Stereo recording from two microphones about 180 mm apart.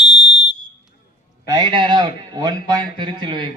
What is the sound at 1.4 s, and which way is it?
A man's voice, 20° right (ahead or behind).